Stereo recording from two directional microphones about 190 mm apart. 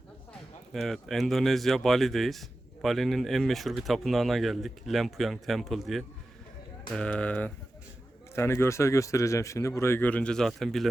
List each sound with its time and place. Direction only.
0.7 s speech: centre (ahead or behind)